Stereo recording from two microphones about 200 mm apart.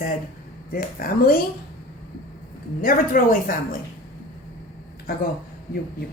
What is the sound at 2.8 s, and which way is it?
Speech, 45° left (ahead or behind).